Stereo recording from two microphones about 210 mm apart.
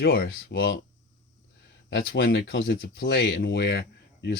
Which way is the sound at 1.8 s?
50° left (ahead or behind).